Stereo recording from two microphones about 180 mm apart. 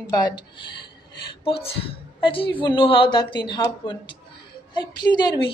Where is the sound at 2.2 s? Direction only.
30° left (ahead or behind).